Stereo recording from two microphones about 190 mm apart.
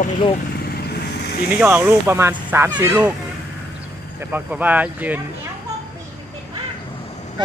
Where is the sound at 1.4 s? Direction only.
5° right (ahead or behind).